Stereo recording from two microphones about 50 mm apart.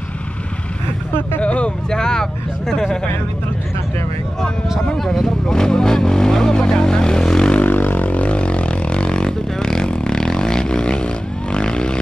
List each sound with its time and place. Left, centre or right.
1.4 s vehicle: left
1.9 s speech: centre
4.9 s speech: centre
7.6 s vehicle: left; by 12.0 s centre